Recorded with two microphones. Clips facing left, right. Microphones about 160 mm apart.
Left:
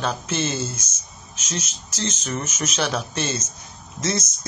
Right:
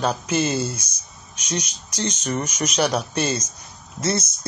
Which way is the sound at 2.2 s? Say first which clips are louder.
Right 3 dB; 10° right (ahead or behind).